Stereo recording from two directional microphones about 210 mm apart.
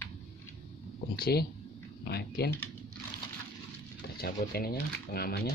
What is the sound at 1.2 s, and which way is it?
Speech, 45° left (ahead or behind).